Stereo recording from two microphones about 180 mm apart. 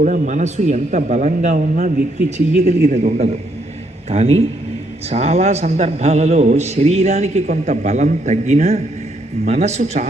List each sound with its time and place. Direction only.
0.0 s a man's voice: 45° right (ahead or behind)